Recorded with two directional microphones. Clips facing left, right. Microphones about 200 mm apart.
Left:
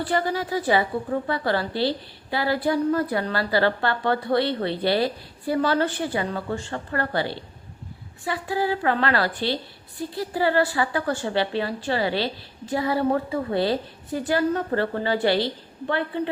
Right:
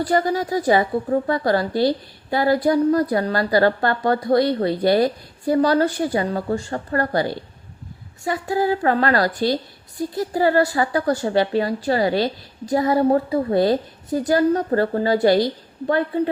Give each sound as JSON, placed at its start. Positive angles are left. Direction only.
{"t": 0.0, "sound": "a woman's voice", "side_deg": -40}